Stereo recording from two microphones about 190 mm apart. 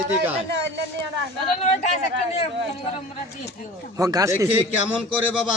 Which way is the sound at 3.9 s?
20° right (ahead or behind).